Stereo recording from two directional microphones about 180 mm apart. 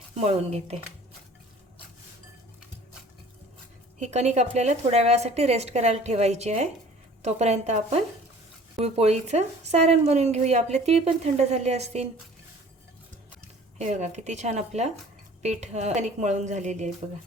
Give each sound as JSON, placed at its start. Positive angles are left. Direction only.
{"t": 0.2, "sound": "speech", "side_deg": -35}
{"t": 4.0, "sound": "speech", "side_deg": -40}
{"t": 13.7, "sound": "speech", "side_deg": -40}